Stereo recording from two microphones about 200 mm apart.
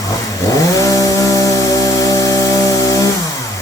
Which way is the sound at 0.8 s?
15° left (ahead or behind).